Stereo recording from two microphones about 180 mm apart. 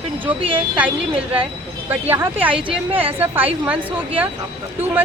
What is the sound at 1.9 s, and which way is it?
A woman's voice, 10° right (ahead or behind).